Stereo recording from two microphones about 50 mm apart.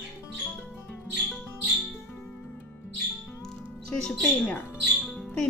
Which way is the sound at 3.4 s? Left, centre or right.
Centre.